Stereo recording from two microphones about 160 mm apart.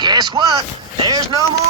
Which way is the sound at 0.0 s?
25° right (ahead or behind).